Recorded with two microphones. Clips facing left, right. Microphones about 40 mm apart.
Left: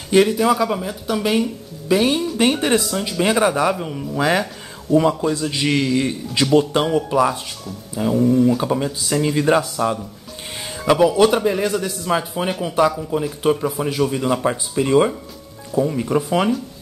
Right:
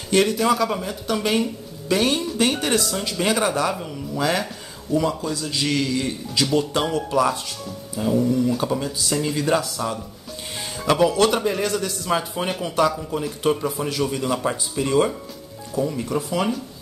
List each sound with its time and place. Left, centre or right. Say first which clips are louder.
0.1 s speech: left 4 dB; centre
2.3 s speech: left 4 dB; centre
4.9 s speech: left 6 dB; centre
5.2 s a man's voice: left 5 dB; left
10.9 s a man's voice: left 4 dB; centre; by 16.4 s left